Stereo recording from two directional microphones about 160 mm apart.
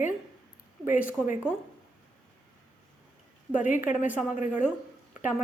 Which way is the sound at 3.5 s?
50° left (ahead or behind).